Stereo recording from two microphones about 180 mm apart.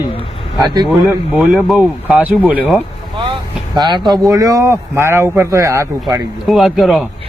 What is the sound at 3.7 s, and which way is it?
Speech, 25° right (ahead or behind).